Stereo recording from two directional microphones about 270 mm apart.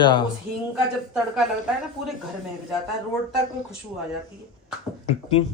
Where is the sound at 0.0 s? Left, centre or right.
Centre.